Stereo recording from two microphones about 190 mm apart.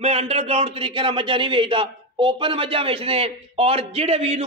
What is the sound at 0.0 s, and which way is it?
A man's voice, 35° right (ahead or behind).